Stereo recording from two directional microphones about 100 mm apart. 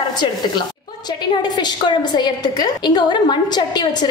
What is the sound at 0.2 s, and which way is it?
A woman's voice, 50° left (ahead or behind).